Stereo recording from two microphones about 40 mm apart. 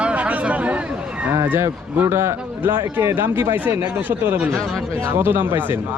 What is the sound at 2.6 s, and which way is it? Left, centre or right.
Speech, right.